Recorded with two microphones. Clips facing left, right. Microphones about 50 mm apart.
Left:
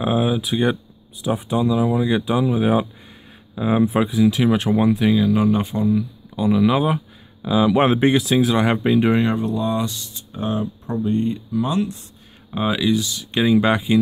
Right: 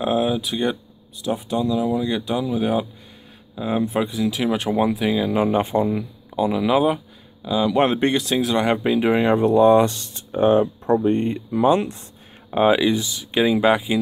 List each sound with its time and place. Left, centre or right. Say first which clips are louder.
0.0 s speech: left 1 dB; centre
1.2 s speech: left 2 dB; centre
5.2 s speech: left 1 dB; centre
6.3 s speech: left 1 dB; centre
9.2 s speech: right 6 dB; right
13.4 s speech: even; centre